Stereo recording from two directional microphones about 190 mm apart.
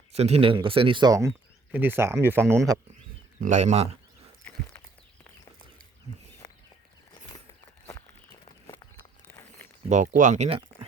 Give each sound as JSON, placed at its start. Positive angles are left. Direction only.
{"t": 0.1, "sound": "speech", "side_deg": -35}
{"t": 3.4, "sound": "speech", "side_deg": -40}
{"t": 8.4, "sound": "walk", "side_deg": 20}
{"t": 9.2, "sound": "a sound", "side_deg": 10}
{"t": 9.9, "sound": "speech", "side_deg": -40}